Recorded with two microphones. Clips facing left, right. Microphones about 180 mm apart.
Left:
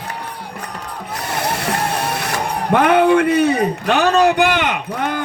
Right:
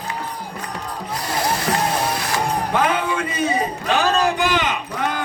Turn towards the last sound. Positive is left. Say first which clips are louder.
# left 2 dB
turn(degrees=60)  # may be behind; listen again after turning